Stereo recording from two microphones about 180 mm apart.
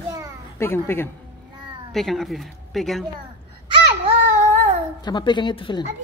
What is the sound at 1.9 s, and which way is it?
Speech, centre (ahead or behind).